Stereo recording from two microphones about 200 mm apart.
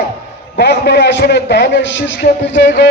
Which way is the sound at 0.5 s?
60° left (ahead or behind).